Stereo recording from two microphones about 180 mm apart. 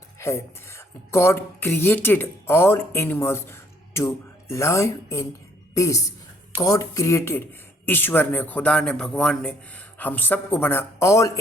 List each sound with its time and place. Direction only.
0.2 s a woman's voice: 15° left (ahead or behind)